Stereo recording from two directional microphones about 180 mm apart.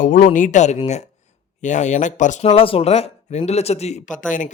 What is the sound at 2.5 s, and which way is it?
Speech, 30° left (ahead or behind).